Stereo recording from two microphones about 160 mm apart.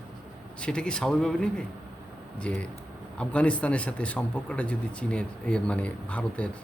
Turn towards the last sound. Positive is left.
turn(degrees=10)  # may be behind; listen again after turning